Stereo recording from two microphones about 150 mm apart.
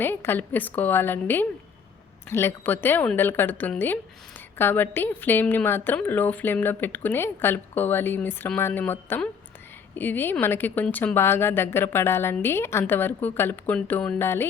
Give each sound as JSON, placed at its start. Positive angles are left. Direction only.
{"t": 0.0, "sound": "a woman's voice", "side_deg": 15}